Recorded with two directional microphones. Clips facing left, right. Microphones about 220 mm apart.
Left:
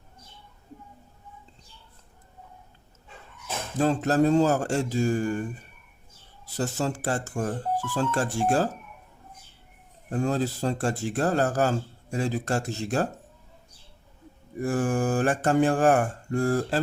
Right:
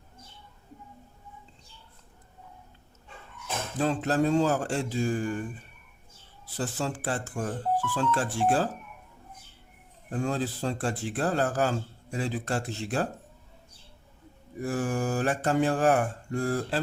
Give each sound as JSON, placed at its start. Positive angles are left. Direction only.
{"t": 3.8, "sound": "mantra", "side_deg": 45}
{"t": 10.1, "sound": "mantra", "side_deg": 40}
{"t": 14.6, "sound": "mantra", "side_deg": 50}